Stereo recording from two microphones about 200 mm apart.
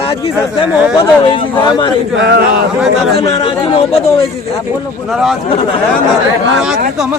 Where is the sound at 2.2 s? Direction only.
60° right (ahead or behind).